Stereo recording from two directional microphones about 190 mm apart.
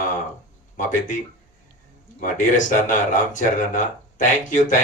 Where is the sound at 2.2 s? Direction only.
40° left (ahead or behind).